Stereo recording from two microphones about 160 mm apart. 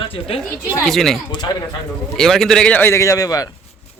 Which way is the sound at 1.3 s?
25° left (ahead or behind).